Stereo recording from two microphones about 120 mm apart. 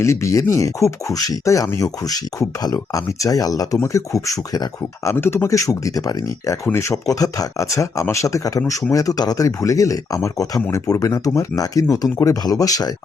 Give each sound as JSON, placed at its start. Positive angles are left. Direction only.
{"t": 0.0, "sound": "speech", "side_deg": 25}